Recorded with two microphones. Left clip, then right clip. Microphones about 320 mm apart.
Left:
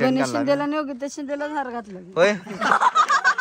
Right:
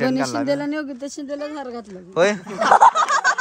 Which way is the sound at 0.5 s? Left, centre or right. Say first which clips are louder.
Left 1 dB; centre.